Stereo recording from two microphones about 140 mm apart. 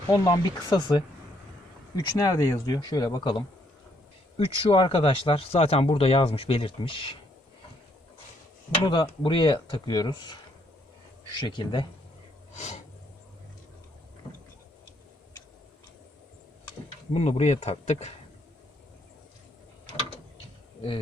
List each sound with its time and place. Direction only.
0.1 s speech: 30° left (ahead or behind)
8.8 s speech: 30° left (ahead or behind)
11.3 s speech: 30° left (ahead or behind)
12.5 s snort: 50° left (ahead or behind)
17.1 s speech: 45° left (ahead or behind)